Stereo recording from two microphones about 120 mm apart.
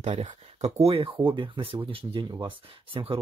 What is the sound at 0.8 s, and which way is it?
Speech, 50° right (ahead or behind).